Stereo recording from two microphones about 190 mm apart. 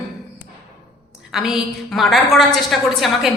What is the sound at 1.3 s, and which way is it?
A woman's voice, 5° right (ahead or behind).